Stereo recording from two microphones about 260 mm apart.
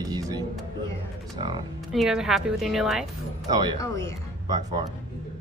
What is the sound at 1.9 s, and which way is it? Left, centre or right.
A woman's voice, centre.